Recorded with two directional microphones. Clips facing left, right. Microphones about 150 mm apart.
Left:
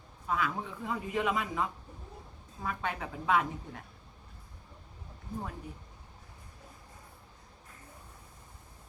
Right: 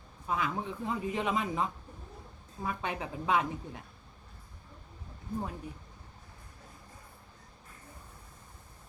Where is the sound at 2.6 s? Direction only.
20° right (ahead or behind).